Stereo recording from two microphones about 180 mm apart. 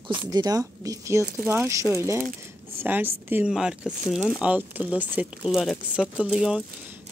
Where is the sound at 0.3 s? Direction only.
20° right (ahead or behind).